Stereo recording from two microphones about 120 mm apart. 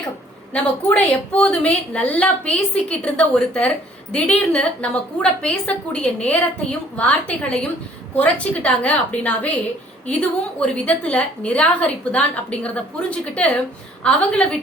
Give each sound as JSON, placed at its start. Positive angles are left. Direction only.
{"t": 0.5, "sound": "a woman's voice", "side_deg": 10}